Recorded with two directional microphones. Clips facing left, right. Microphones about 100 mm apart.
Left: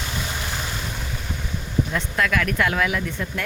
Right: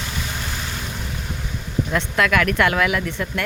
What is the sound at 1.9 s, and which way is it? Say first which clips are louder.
Speech: right 5 dB; 70° right (ahead or behind).